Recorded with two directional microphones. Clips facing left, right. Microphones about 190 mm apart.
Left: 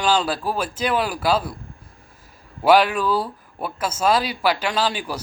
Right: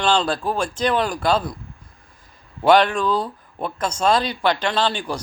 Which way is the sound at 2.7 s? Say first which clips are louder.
Even; 5° left (ahead or behind).